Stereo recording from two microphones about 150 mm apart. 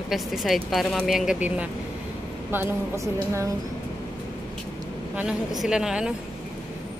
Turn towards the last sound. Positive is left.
turn(degrees=-5)  # may be behind; listen again after turning